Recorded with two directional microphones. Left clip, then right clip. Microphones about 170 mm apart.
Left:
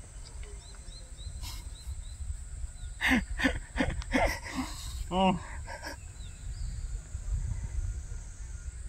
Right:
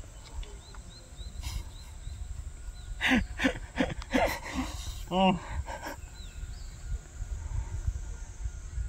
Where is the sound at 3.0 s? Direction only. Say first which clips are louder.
Even; 5° right (ahead or behind).